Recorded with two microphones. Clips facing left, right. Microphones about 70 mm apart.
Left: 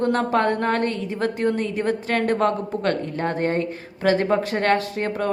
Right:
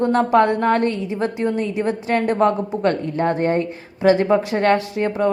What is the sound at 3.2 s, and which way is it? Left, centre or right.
Speech, right.